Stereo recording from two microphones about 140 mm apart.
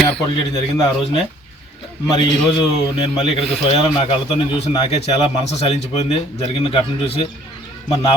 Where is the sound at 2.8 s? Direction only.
45° left (ahead or behind).